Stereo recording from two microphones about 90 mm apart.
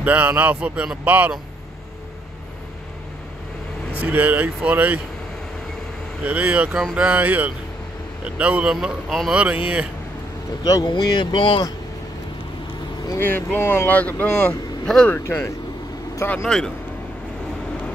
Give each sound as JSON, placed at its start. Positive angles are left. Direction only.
{"t": 0.0, "sound": "speech", "side_deg": -15}
{"t": 4.0, "sound": "speech", "side_deg": -20}
{"t": 6.2, "sound": "speech", "side_deg": -15}
{"t": 8.7, "sound": "a man's voice", "side_deg": 0}
{"t": 9.3, "sound": "speech", "side_deg": -15}
{"t": 10.6, "sound": "speech", "side_deg": 50}
{"t": 13.2, "sound": "speech", "side_deg": 20}
{"t": 15.0, "sound": "speech", "side_deg": 25}
{"t": 16.4, "sound": "speech", "side_deg": 5}